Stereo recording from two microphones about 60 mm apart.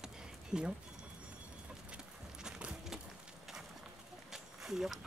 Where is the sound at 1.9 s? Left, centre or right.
Centre.